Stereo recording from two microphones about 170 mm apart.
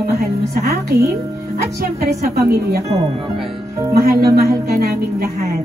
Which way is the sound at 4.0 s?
60° right (ahead or behind).